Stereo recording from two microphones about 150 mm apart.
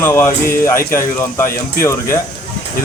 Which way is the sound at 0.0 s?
15° left (ahead or behind).